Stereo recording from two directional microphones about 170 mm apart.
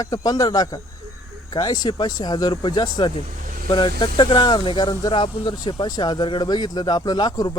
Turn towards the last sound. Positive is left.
turn(degrees=25)  # may be behind; listen again after turning